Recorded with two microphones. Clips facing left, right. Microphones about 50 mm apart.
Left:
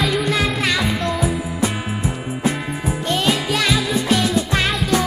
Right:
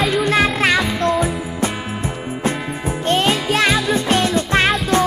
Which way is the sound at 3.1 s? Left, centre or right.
Right.